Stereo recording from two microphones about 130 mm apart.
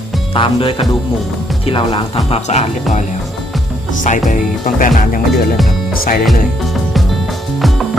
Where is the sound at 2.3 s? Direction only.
60° left (ahead or behind).